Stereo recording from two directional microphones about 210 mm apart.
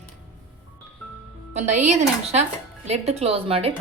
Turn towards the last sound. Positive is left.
turn(degrees=-25)  # may be behind; listen again after turning